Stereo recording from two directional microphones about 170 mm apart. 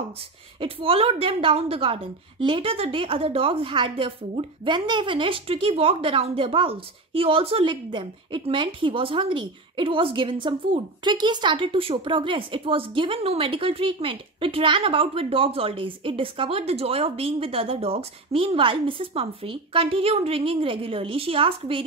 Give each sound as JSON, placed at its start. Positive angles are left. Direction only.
{"t": 0.6, "sound": "a woman's voice", "side_deg": -30}